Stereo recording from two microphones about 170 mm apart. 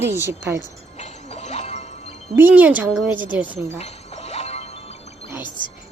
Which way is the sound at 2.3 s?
10° right (ahead or behind).